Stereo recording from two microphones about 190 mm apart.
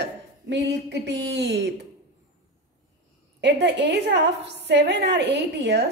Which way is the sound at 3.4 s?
65° right (ahead or behind).